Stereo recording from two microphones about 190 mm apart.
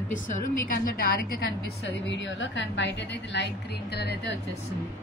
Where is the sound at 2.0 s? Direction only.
70° left (ahead or behind).